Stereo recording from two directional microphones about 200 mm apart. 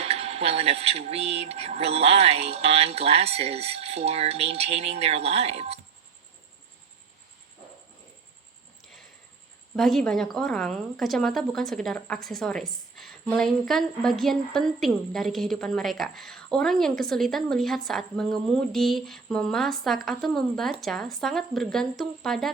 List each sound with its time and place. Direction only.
0.0 s speech: 30° right (ahead or behind)
9.7 s a woman's voice: centre (ahead or behind)